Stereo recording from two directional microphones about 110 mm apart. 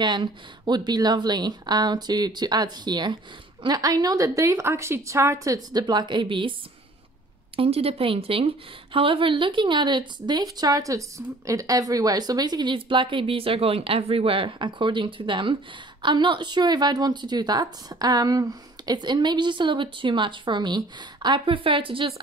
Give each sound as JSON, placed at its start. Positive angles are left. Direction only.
{"t": 0.0, "sound": "speech", "side_deg": -40}
{"t": 7.5, "sound": "a woman's voice", "side_deg": -60}